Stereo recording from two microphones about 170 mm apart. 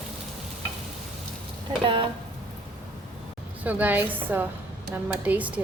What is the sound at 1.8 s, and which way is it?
Speech, 30° right (ahead or behind).